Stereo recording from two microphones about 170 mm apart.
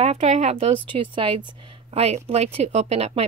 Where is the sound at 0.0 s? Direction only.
40° right (ahead or behind).